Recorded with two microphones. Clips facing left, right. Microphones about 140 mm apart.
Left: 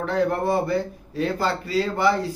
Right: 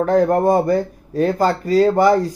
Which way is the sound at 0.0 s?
45° right (ahead or behind).